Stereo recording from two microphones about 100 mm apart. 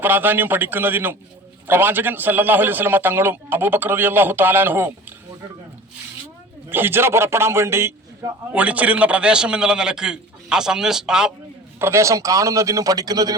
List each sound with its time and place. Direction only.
0.0 s a man's voice: 20° right (ahead or behind)
6.7 s a man's voice: 20° right (ahead or behind)
8.5 s a man's voice: 15° right (ahead or behind)
11.8 s a man's voice: 25° right (ahead or behind)